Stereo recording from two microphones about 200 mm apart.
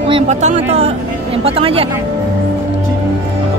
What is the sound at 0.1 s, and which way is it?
Speech, 35° right (ahead or behind).